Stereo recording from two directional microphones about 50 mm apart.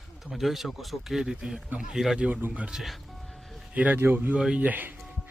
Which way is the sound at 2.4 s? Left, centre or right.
Right.